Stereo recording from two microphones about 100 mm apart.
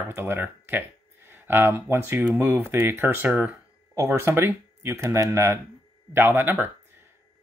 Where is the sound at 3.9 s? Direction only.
30° right (ahead or behind).